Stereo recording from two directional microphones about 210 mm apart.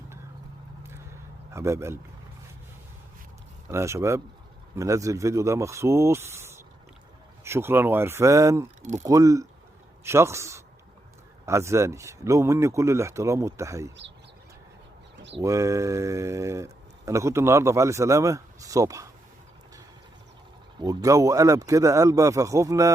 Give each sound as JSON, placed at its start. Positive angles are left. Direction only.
{"t": 1.5, "sound": "speech", "side_deg": -15}
{"t": 3.7, "sound": "speech", "side_deg": -10}
{"t": 15.4, "sound": "speech", "side_deg": -15}
{"t": 20.8, "sound": "speech", "side_deg": -15}